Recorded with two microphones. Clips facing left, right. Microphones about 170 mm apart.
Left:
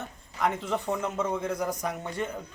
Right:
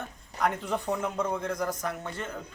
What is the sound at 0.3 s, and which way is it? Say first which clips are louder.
A man's voice: left 1 dB; centre (ahead or behind).